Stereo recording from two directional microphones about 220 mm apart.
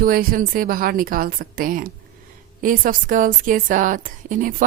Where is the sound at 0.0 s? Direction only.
40° right (ahead or behind).